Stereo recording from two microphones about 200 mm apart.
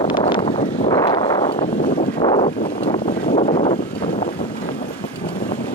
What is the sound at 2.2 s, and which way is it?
Wind, 25° left (ahead or behind).